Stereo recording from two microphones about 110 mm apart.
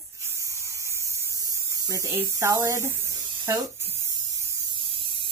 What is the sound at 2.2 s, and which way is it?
Speech, 25° right (ahead or behind).